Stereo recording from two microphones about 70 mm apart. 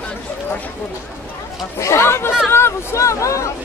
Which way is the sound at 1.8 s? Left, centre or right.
Left.